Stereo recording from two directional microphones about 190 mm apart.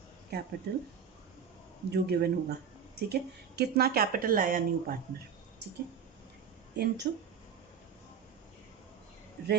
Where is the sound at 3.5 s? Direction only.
55° right (ahead or behind).